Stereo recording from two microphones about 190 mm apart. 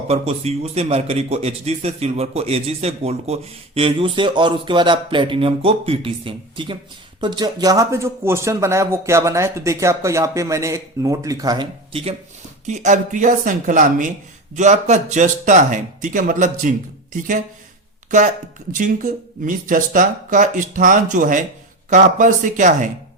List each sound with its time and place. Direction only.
0.1 s a man's voice: 35° right (ahead or behind)
12.6 s a man's voice: 40° right (ahead or behind)
18.7 s a man's voice: 45° right (ahead or behind)